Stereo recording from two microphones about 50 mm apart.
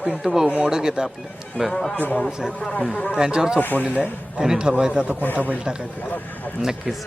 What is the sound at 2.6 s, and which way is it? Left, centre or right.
Speech, left.